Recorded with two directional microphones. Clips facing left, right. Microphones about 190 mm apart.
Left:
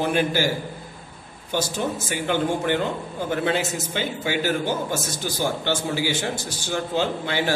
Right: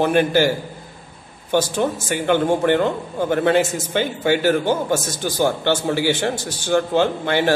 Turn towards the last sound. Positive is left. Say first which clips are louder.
# right 6 dB
turn(degrees=-55)  # may be behind; listen again after turning